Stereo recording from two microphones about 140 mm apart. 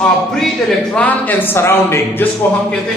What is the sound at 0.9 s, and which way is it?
A man's voice, 10° left (ahead or behind).